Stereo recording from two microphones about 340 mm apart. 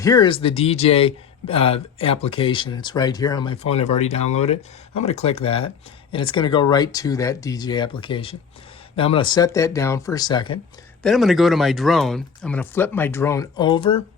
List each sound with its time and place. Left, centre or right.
0.0 s speech: centre
11.0 s speech: centre